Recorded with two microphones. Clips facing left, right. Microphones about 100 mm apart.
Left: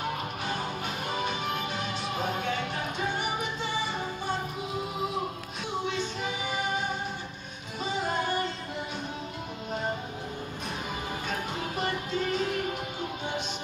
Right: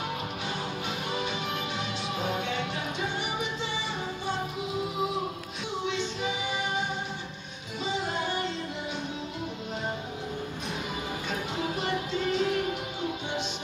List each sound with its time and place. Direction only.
1.1 s music: 45° left (ahead or behind)
5.9 s music: 45° left (ahead or behind)
7.8 s music: 45° left (ahead or behind)
11.2 s music: 45° left (ahead or behind)